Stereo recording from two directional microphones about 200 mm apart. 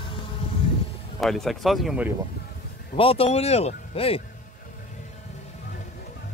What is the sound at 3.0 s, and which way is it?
Speech, 30° left (ahead or behind).